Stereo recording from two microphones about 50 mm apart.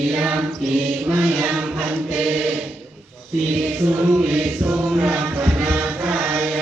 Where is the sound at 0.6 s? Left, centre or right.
Centre.